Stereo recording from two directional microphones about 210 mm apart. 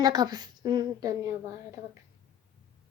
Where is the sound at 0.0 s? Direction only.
20° right (ahead or behind).